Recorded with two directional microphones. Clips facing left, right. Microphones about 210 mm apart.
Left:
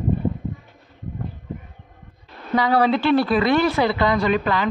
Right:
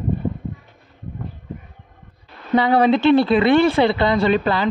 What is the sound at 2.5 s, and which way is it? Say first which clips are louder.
Speech: right 3 dB; 25° right (ahead or behind).